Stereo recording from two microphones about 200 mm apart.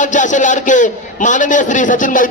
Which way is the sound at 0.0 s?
40° left (ahead or behind).